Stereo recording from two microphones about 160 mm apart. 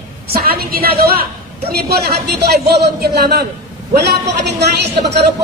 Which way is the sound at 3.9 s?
90° right.